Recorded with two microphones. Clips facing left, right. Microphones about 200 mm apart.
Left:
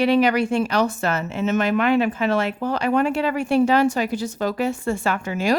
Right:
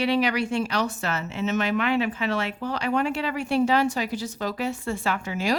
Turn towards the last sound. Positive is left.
turn(degrees=50)  # may be behind; listen again after turning